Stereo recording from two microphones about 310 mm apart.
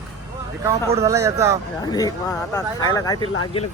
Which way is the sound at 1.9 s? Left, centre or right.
Centre.